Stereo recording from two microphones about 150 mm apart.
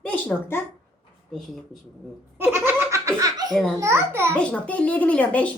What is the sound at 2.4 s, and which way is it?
Laughter, 15° right (ahead or behind).